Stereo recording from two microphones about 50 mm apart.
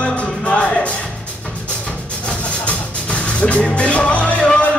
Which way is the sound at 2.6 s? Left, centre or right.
Left.